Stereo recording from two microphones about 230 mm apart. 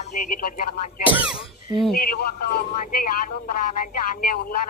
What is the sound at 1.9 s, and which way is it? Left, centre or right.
A man's voice, left.